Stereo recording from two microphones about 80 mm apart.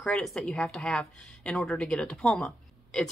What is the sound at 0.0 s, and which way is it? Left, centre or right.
A woman's voice, centre.